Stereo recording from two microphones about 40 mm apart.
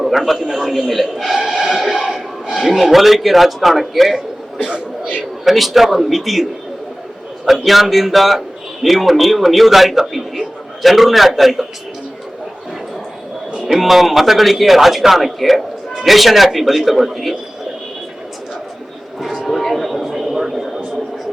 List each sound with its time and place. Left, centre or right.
0.0 s a man's voice: centre
5.5 s speech: centre
13.7 s speech: centre
19.5 s a sound: centre